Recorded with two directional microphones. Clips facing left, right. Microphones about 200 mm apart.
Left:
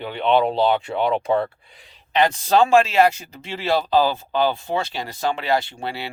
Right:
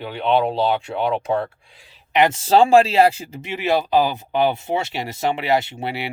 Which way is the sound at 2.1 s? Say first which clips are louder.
Right 2 dB; 20° right (ahead or behind).